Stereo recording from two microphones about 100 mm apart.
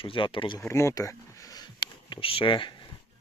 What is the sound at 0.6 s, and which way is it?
Speech, 30° left (ahead or behind).